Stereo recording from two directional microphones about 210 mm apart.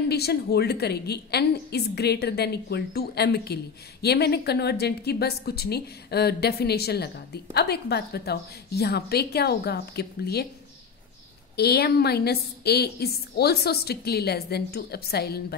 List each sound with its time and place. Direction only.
0.1 s a woman's voice: 50° left (ahead or behind)
11.5 s a woman's voice: 50° left (ahead or behind)